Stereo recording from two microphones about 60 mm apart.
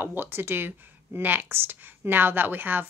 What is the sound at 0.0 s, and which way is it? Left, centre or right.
Speech, right.